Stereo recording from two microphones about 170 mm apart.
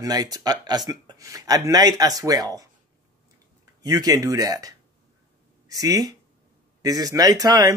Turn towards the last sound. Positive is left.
turn(degrees=-20)  # may be behind; listen again after turning